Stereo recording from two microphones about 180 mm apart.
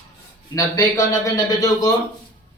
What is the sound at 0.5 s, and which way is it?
A man's voice, 15° left (ahead or behind).